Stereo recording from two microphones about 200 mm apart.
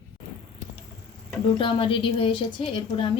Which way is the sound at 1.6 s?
25° left (ahead or behind).